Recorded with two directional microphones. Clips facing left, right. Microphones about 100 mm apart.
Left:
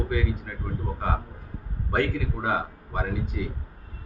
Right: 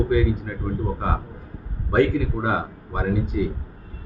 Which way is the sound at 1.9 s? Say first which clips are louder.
Right 7 dB; 20° right (ahead or behind).